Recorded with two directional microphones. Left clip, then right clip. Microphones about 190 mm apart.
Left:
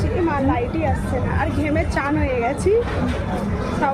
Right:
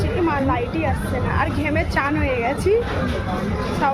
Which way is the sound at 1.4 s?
5° right (ahead or behind).